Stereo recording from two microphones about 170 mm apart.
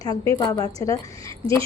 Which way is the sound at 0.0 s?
20° left (ahead or behind).